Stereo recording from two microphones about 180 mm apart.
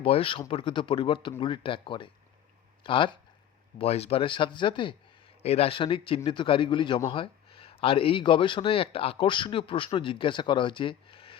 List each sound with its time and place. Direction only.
0.0 s speech: 30° left (ahead or behind)